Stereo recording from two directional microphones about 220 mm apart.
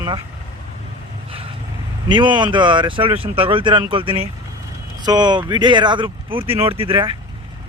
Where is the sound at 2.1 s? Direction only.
20° right (ahead or behind).